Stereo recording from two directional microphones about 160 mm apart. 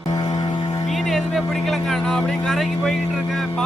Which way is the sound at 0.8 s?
Centre (ahead or behind).